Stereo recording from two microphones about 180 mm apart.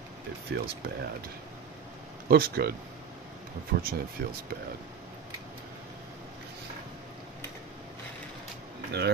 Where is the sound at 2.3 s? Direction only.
60° right (ahead or behind).